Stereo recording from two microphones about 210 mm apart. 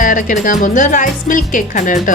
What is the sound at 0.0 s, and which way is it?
Speech, 40° left (ahead or behind).